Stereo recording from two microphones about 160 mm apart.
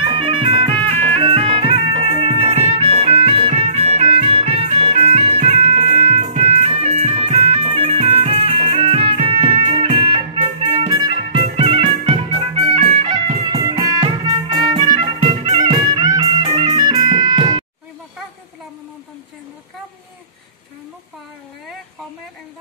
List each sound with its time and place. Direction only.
0.0 s music: 30° right (ahead or behind)